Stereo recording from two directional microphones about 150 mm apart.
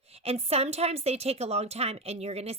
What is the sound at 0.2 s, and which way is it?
A woman's voice, 40° right (ahead or behind).